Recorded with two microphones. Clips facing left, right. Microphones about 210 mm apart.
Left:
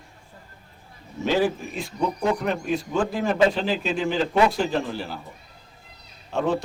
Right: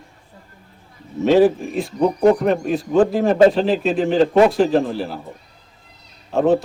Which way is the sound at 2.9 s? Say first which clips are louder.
Right 11 dB; 35° right (ahead or behind).